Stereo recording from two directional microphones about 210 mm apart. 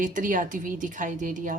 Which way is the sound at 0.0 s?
40° right (ahead or behind).